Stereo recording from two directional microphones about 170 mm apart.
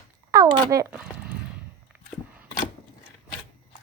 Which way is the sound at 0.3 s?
20° right (ahead or behind).